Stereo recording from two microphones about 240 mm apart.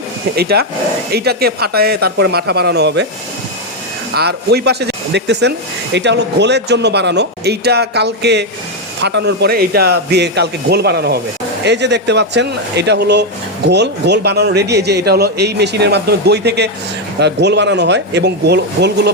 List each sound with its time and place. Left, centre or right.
0.3 s a man's voice: right
4.1 s speech: right